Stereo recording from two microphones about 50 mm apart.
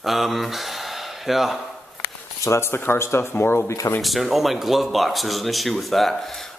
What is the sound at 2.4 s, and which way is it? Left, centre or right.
Speech, left.